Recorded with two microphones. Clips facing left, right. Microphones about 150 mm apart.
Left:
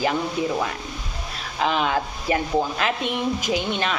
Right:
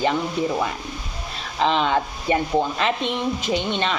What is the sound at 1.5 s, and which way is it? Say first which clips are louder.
A woman's voice: right 2 dB; 5° left (ahead or behind).